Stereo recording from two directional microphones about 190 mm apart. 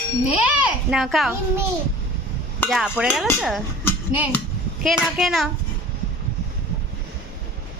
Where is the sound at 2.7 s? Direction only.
Centre (ahead or behind).